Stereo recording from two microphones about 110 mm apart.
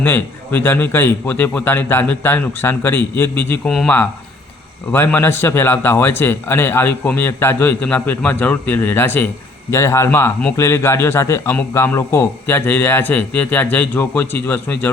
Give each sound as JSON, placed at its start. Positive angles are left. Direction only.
{"t": 0.0, "sound": "a man's voice", "side_deg": 20}